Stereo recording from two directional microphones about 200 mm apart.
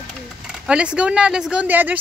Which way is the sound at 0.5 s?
5° right (ahead or behind).